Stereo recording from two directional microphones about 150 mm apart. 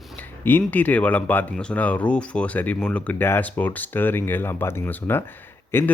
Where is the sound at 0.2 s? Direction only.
10° left (ahead or behind).